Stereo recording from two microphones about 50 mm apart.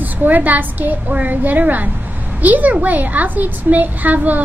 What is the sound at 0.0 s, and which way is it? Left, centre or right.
A woman's voice, right.